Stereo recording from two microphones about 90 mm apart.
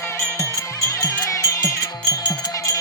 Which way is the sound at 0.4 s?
40° left (ahead or behind).